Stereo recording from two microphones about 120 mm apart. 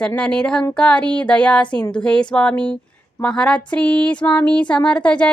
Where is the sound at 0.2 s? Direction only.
10° left (ahead or behind).